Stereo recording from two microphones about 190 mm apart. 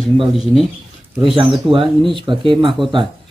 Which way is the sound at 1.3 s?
25° right (ahead or behind).